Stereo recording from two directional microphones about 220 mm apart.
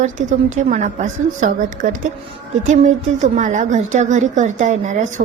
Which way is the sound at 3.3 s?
35° right (ahead or behind).